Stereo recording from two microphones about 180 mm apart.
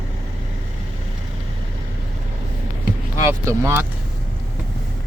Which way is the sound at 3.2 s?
15° right (ahead or behind).